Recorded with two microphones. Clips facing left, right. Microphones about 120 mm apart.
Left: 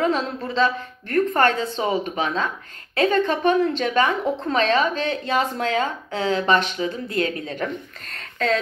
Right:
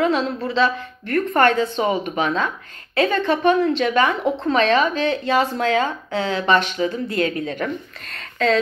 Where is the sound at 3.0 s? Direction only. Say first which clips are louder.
Right 1 dB; 45° left (ahead or behind).